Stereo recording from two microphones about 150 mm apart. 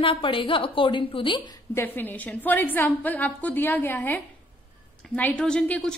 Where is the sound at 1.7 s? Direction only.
10° left (ahead or behind).